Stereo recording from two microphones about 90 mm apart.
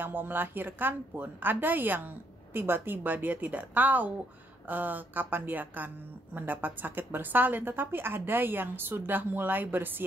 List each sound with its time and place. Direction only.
0.0 s a woman's voice: 20° right (ahead or behind)